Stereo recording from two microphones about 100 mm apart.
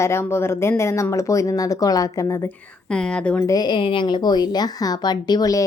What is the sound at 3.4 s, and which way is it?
Speech, 40° left (ahead or behind).